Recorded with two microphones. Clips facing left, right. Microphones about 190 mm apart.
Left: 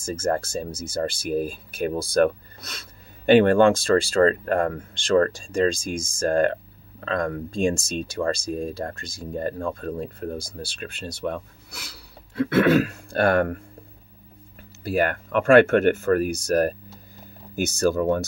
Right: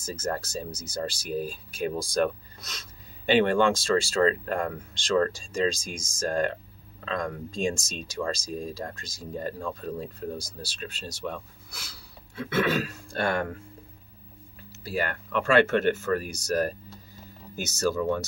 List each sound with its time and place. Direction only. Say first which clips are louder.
0.0 s speech: left 7 dB; 55° left (ahead or behind)
14.6 s speech: left 7 dB; 55° left (ahead or behind)